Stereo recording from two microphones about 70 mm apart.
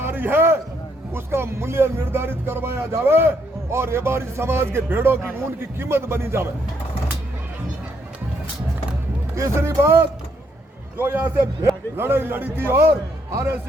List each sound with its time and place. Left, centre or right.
0.0 s a sound: right
1.1 s speech: right
9.3 s a man's voice: right